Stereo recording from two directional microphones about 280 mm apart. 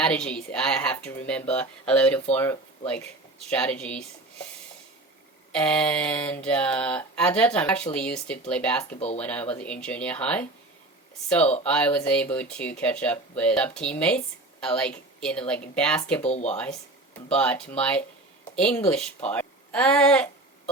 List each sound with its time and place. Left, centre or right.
0.0 s mantra: centre
5.5 s mantra: centre
8.9 s speech: left
9.1 s mantra: centre
11.6 s mantra: centre
16.2 s speech: left
17.2 s mantra: centre
18.5 s speech: centre
18.9 s mantra: centre
19.3 s a woman's voice: centre